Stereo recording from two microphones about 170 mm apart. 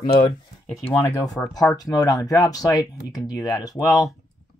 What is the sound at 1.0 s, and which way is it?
Speech, 20° left (ahead or behind).